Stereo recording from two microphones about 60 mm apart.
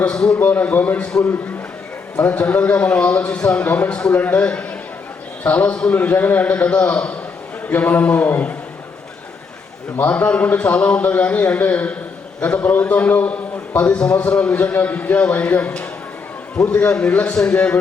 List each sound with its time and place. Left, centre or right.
0.0 s a man's voice: centre
0.3 s a man's voice: left
2.2 s a man's voice: left
5.9 s a man's voice: left
10.0 s a man's voice: left